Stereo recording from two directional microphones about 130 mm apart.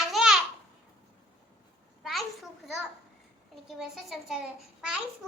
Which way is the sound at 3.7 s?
5° right (ahead or behind).